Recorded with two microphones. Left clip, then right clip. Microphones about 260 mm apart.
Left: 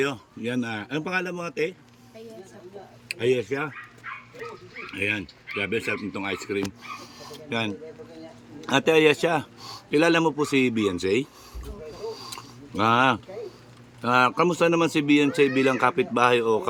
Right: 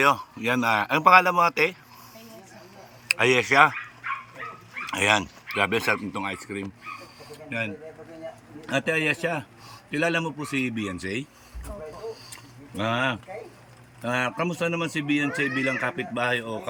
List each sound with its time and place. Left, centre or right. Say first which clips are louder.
0.0 s a man's voice: right 6 dB; centre
3.1 s speech: right 4 dB; centre
4.1 s dog: right 6 dB; centre
4.9 s speech: right 6 dB; right
5.8 s a man's voice: right 3 dB; centre
7.5 s speech: left 2 dB; centre
12.2 s a sound: left 6 dB; centre
14.0 s speech: left 6 dB; centre